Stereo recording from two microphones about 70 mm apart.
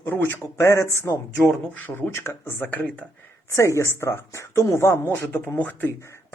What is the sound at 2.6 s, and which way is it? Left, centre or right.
Speech, left.